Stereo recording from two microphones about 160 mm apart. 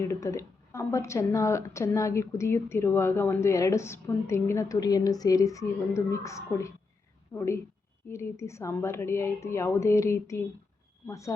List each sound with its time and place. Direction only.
0.0 s a woman's voice: 20° left (ahead or behind)